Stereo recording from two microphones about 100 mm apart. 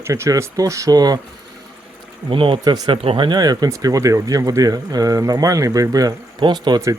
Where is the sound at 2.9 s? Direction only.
70° right (ahead or behind).